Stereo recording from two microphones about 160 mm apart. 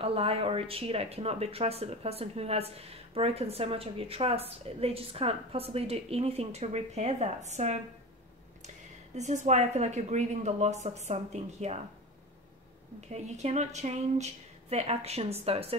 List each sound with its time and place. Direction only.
0.0 s speech: 35° right (ahead or behind)
13.1 s speech: 45° right (ahead or behind)